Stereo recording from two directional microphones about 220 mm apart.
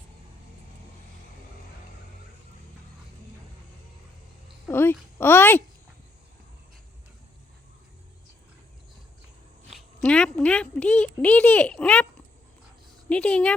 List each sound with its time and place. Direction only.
4.7 s a child's voice: 10° left (ahead or behind)
9.6 s a woman's voice: 5° left (ahead or behind)
13.1 s a woman's voice: 5° left (ahead or behind)